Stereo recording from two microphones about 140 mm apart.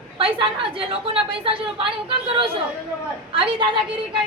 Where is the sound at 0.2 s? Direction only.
40° right (ahead or behind).